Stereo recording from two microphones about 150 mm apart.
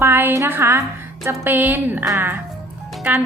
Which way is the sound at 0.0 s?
15° right (ahead or behind).